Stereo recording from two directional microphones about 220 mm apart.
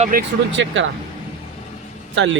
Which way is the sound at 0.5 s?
55° right (ahead or behind).